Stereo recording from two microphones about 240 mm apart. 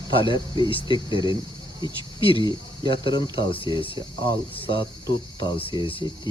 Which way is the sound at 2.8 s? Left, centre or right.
Centre.